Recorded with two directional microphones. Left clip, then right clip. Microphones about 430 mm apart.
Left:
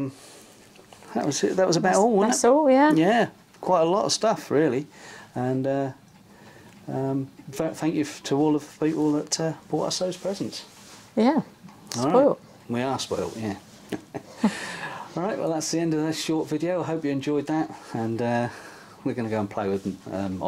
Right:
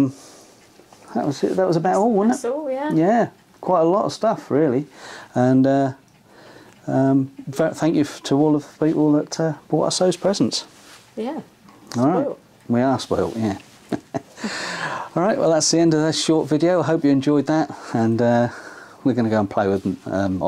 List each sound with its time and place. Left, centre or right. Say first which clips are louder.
1.1 s speech: right 3 dB; centre
2.2 s speech: left 4 dB; left
3.0 s speech: right 3 dB; centre
5.0 s speech: right 10 dB; right
9.8 s speech: right 9 dB; right
11.9 s speech: left 1 dB; right